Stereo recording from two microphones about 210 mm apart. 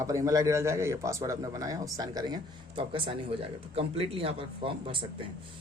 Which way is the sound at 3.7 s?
25° right (ahead or behind).